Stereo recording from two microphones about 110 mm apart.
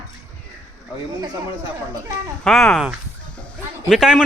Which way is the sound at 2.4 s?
5° left (ahead or behind).